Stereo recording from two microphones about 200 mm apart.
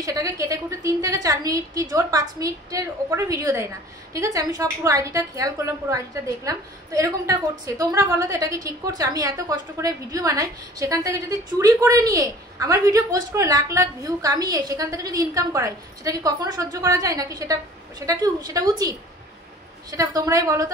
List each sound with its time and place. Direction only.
0.0 s a woman's voice: 15° right (ahead or behind)